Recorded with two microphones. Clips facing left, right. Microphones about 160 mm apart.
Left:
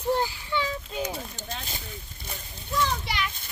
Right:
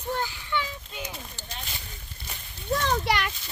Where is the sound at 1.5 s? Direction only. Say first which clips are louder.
Left 3 dB; 45° left (ahead or behind).